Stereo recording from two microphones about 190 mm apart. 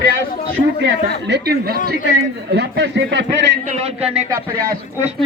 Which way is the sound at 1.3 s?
55° right (ahead or behind).